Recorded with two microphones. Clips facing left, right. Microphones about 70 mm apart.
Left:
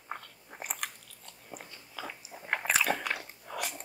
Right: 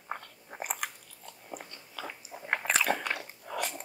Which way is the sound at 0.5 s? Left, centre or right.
Centre.